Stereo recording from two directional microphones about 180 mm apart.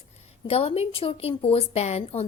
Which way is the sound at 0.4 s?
35° left (ahead or behind).